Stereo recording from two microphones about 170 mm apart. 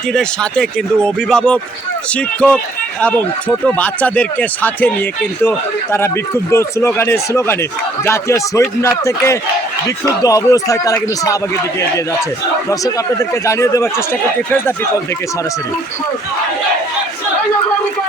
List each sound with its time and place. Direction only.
0.1 s speech: 5° left (ahead or behind)
12.8 s speech: 20° left (ahead or behind)